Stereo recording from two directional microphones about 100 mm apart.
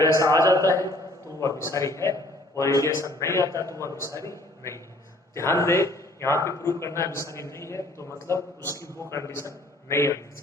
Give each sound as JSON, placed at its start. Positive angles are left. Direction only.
{"t": 0.0, "sound": "a man's voice", "side_deg": 30}